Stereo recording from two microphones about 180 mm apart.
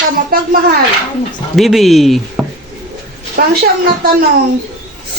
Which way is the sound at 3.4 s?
60° right (ahead or behind).